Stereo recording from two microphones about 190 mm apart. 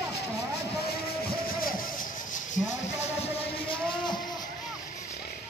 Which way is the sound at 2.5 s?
40° left (ahead or behind).